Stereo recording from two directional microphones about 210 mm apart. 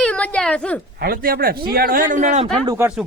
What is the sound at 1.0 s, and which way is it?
Speech, 45° right (ahead or behind).